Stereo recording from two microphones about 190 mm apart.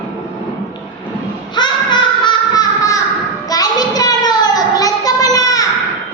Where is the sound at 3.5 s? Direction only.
20° left (ahead or behind).